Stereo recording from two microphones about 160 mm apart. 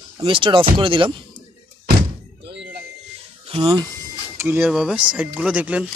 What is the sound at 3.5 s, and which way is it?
Speech, 35° right (ahead or behind).